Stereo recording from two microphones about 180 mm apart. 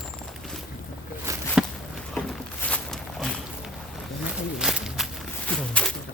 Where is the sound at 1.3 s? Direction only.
15° right (ahead or behind).